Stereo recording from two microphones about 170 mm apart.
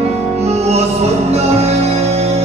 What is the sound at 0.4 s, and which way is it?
Music, 40° right (ahead or behind).